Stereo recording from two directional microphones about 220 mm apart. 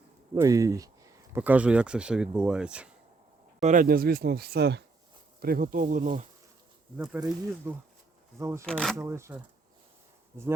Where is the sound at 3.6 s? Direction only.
35° right (ahead or behind).